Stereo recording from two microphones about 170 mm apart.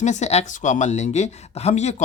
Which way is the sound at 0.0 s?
45° left (ahead or behind).